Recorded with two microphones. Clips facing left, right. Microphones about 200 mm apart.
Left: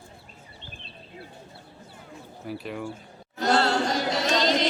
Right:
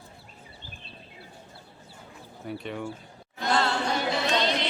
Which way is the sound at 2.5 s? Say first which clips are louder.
Left 1 dB; centre (ahead or behind).